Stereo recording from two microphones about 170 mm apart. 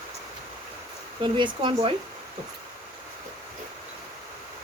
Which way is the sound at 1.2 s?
30° right (ahead or behind).